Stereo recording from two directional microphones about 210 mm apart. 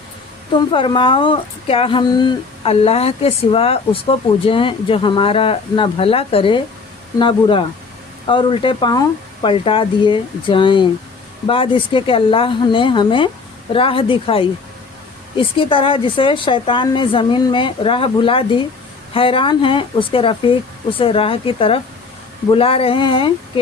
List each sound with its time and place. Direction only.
0.5 s a woman's voice: 25° left (ahead or behind)